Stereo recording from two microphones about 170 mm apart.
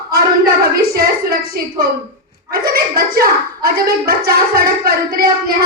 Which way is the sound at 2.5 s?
60° right (ahead or behind).